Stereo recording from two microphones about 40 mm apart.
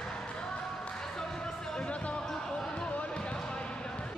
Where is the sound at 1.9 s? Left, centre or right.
Left.